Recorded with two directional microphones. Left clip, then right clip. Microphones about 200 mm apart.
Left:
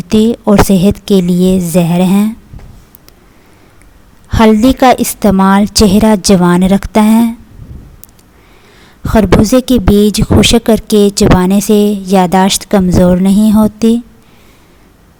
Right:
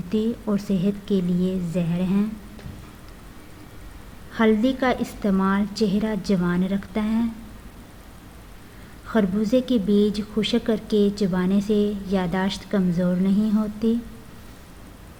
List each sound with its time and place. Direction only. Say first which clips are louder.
0.1 s speech: left 16 dB; 50° left (ahead or behind)
4.3 s speech: left 13 dB; 50° left (ahead or behind)
9.0 s speech: left 15 dB; 45° left (ahead or behind)